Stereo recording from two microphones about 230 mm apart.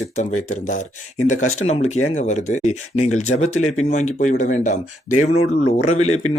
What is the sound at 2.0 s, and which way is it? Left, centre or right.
Speech, left.